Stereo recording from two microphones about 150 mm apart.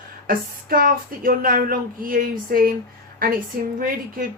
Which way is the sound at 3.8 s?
70° right (ahead or behind).